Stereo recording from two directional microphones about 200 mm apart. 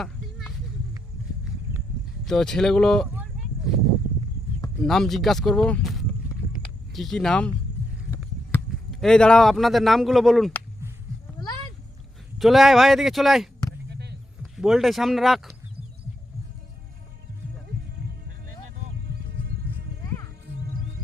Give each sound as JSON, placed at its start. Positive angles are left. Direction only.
{"t": 0.0, "sound": "a sound", "side_deg": 0}
{"t": 2.2, "sound": "speech", "side_deg": 0}
{"t": 4.8, "sound": "speech", "side_deg": 0}
{"t": 8.9, "sound": "speech", "side_deg": 0}
{"t": 12.4, "sound": "speech", "side_deg": 0}
{"t": 13.9, "sound": "a sound", "side_deg": -55}
{"t": 14.5, "sound": "speech", "side_deg": 0}